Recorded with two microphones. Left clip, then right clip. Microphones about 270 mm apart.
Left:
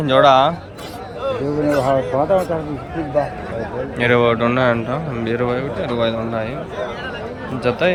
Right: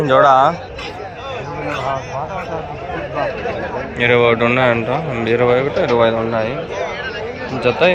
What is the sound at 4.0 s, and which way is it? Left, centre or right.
Speech, centre.